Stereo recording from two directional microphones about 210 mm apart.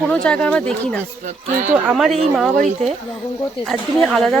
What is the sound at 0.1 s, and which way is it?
Speech, 5° left (ahead or behind).